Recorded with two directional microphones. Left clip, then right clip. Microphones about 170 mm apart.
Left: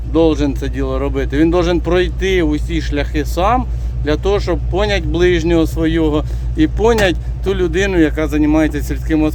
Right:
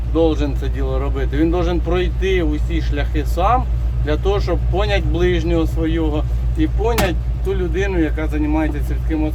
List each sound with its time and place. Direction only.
0.1 s speech: 40° left (ahead or behind); by 9.3 s 60° left (ahead or behind)